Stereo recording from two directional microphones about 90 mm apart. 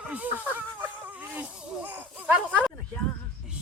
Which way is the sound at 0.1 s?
15° right (ahead or behind).